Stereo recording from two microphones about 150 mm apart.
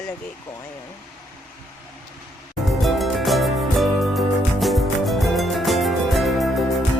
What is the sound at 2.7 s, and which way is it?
Music, centre (ahead or behind).